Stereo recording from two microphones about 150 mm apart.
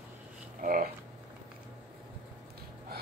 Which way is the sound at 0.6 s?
70° right (ahead or behind).